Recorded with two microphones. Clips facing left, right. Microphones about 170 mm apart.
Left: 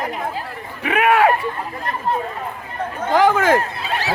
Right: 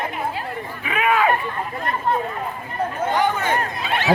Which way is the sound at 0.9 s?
70° left (ahead or behind).